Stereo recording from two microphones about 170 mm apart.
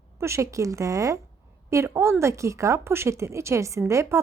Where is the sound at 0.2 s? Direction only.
15° right (ahead or behind).